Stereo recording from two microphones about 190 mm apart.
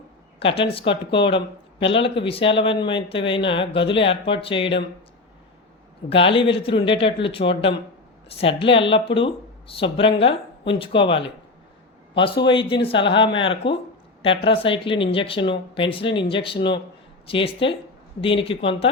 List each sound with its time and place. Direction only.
0.3 s speech: 30° left (ahead or behind)
6.1 s speech: 30° left (ahead or behind)
12.2 s speech: 25° left (ahead or behind)